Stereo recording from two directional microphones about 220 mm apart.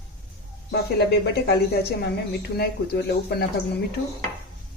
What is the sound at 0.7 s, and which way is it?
Speech, 50° left (ahead or behind).